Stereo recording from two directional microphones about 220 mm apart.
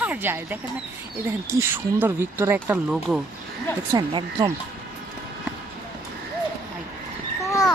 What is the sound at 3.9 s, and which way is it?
Speech, 15° right (ahead or behind).